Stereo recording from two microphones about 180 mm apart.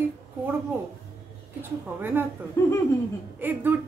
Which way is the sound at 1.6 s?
10° right (ahead or behind).